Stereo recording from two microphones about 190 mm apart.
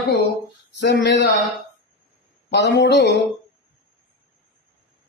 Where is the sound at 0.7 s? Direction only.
65° left (ahead or behind).